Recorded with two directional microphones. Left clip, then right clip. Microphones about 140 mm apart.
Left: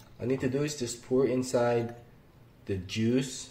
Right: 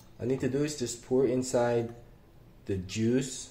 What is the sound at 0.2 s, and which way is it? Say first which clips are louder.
Speech: even; centre (ahead or behind).